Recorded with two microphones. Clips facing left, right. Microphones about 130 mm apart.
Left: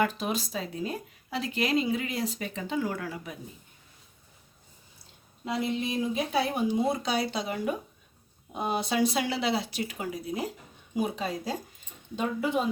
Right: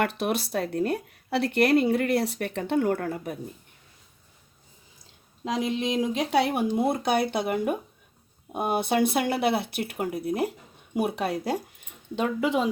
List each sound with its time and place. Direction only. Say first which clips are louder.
0.0 s speech: right 2 dB; 65° right (ahead or behind)
5.5 s speech: right 3 dB; 90° right; by 11.6 s 65° right (ahead or behind)
12.1 s speech: right 3 dB; 85° right